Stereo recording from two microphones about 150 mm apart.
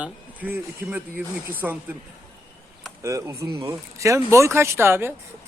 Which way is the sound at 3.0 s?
20° right (ahead or behind).